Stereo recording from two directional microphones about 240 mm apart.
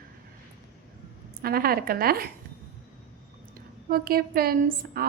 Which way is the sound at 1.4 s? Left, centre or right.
Right.